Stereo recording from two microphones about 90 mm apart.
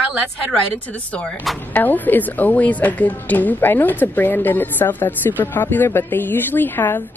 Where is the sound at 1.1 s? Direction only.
10° left (ahead or behind).